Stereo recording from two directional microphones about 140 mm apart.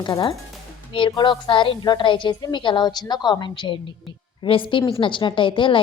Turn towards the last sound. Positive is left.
turn(degrees=35)  # may be behind; listen again after turning